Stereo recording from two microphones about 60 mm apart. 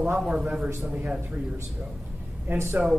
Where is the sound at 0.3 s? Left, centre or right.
Centre.